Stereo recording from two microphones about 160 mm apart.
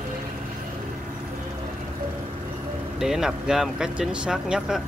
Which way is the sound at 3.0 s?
5° right (ahead or behind).